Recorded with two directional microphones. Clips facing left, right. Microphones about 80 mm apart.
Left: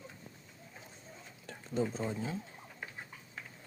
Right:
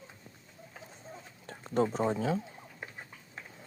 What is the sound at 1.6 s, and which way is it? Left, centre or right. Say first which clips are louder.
Speech: right 6 dB; right.